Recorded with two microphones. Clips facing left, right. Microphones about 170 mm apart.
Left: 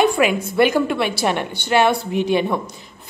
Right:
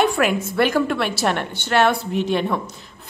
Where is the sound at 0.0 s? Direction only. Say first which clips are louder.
Left 2 dB; centre (ahead or behind).